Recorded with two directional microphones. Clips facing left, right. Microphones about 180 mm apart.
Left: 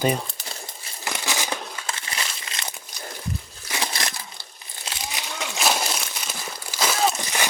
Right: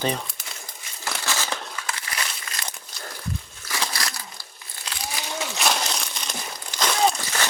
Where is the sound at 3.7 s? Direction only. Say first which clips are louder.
Left 1 dB; 25° left (ahead or behind).